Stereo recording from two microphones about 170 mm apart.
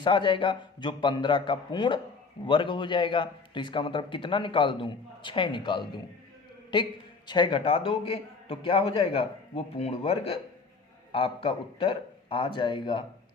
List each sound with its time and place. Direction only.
0.0 s a man's voice: 30° left (ahead or behind)